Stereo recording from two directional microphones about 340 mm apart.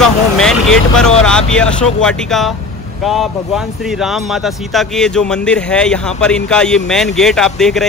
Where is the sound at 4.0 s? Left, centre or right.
Centre.